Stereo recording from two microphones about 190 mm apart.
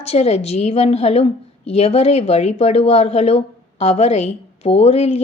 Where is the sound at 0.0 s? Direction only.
35° left (ahead or behind).